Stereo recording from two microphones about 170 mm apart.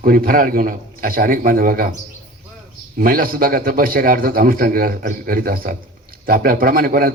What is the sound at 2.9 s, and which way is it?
A man's voice, 55° right (ahead or behind).